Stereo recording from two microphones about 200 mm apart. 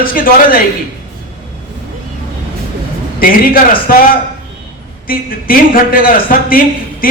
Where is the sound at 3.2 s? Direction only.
45° left (ahead or behind).